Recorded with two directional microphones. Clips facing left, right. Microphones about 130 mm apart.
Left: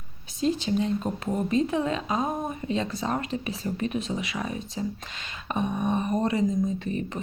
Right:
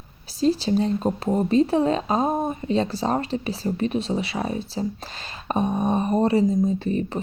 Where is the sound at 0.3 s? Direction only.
35° right (ahead or behind).